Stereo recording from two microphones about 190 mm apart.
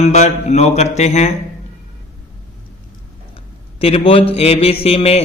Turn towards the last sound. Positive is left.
turn(degrees=30)  # may be behind; listen again after turning